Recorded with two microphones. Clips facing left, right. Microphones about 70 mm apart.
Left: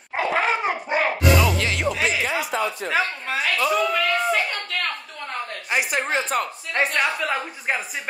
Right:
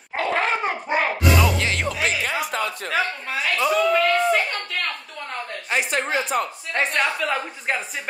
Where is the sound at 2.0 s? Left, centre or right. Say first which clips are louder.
Left 1 dB; right.